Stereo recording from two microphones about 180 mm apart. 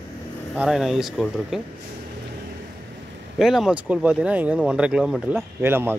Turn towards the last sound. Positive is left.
turn(degrees=-10)  # may be behind; listen again after turning